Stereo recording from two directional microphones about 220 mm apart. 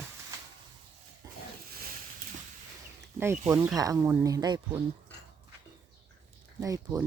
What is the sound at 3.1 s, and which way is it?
Speech, 10° right (ahead or behind).